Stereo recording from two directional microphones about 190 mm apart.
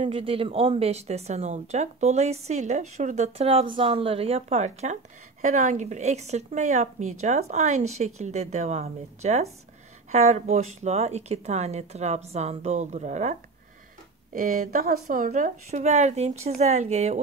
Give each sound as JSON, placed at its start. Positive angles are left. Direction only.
{"t": 0.0, "sound": "speech", "side_deg": -30}
{"t": 14.3, "sound": "speech", "side_deg": -50}